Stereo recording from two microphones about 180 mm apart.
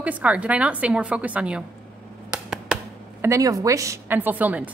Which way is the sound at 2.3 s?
5° right (ahead or behind).